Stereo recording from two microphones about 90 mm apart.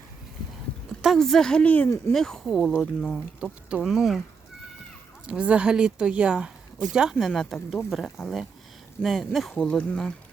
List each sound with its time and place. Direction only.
1.0 s a woman's voice: centre (ahead or behind)
2.1 s speech: 5° left (ahead or behind)
2.7 s a woman's voice: 15° left (ahead or behind)
3.4 s speech: 10° right (ahead or behind)
5.2 s speech: 10° right (ahead or behind)
9.6 s a woman's voice: 10° left (ahead or behind)